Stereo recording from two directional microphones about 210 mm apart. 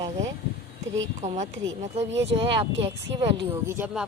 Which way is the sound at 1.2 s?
35° right (ahead or behind).